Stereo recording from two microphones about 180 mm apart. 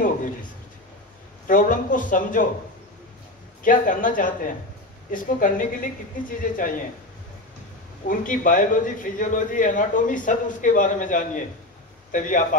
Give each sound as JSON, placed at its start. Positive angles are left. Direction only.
{"t": 0.0, "sound": "a sound", "side_deg": 50}
{"t": 1.5, "sound": "a man's voice", "side_deg": 50}
{"t": 3.6, "sound": "a man's voice", "side_deg": 45}
{"t": 8.1, "sound": "a man's voice", "side_deg": 50}